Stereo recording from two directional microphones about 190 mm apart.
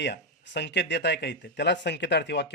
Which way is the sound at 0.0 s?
65° left (ahead or behind).